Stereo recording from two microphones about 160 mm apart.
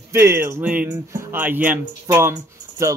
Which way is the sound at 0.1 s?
15° right (ahead or behind).